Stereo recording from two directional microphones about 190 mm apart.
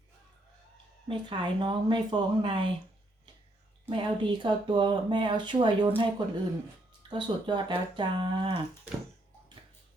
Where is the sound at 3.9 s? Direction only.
25° right (ahead or behind).